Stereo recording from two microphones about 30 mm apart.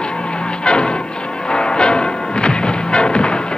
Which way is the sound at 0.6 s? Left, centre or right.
Left.